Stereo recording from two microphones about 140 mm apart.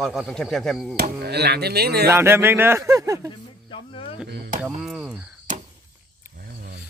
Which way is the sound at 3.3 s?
35° left (ahead or behind).